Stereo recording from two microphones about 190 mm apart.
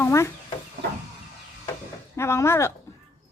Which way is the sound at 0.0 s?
15° left (ahead or behind).